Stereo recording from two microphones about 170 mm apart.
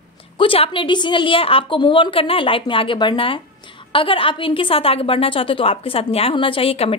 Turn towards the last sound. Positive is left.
turn(degrees=35)  # may be behind; listen again after turning